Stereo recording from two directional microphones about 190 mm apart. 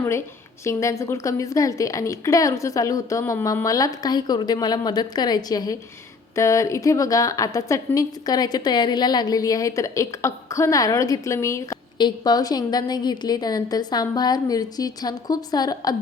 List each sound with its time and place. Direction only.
0.6 s a woman's voice: 15° left (ahead or behind)